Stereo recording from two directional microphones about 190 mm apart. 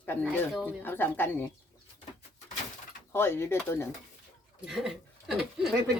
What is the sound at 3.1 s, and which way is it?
Speech, 10° left (ahead or behind).